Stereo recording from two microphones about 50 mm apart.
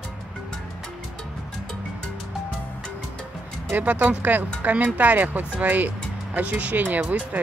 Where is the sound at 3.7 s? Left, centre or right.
Right.